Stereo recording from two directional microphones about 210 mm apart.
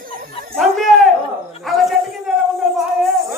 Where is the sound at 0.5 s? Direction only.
Centre (ahead or behind).